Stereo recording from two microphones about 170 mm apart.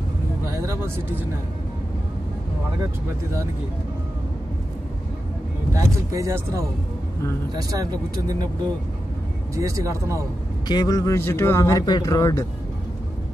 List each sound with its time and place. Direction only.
5.7 s speech: 20° right (ahead or behind)
9.6 s speech: 20° right (ahead or behind)
10.7 s speech: 25° left (ahead or behind)